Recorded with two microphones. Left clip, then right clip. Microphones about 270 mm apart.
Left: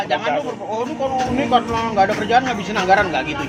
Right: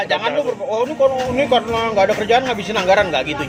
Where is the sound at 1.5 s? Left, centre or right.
Right.